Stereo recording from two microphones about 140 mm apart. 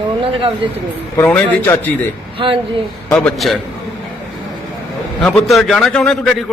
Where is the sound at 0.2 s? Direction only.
40° right (ahead or behind).